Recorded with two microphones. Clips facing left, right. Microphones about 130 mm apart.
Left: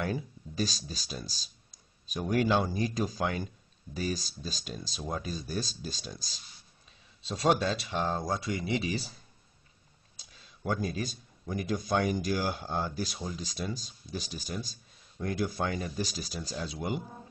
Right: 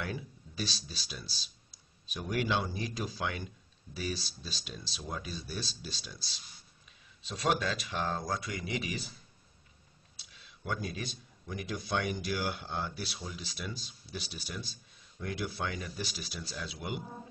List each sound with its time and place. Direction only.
0.0 s speech: 45° left (ahead or behind)
10.1 s a man's voice: 40° left (ahead or behind)